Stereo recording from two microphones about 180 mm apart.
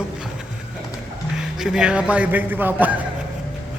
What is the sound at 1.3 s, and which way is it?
A man's voice, 5° right (ahead or behind).